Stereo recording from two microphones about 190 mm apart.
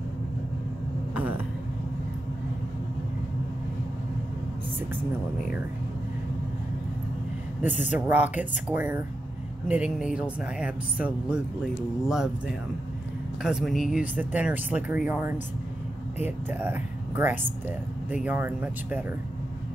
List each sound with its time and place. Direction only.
1.1 s a sound: 10° right (ahead or behind)
7.7 s speech: 40° left (ahead or behind)
8.1 s speech: 10° right (ahead or behind)
13.4 s speech: 5° right (ahead or behind)